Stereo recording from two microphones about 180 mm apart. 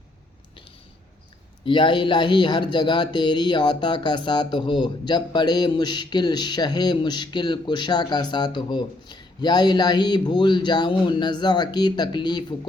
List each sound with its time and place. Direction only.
1.6 s speech: 25° left (ahead or behind)